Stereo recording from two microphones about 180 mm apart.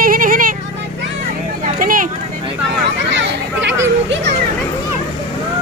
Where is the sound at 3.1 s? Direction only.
80° right.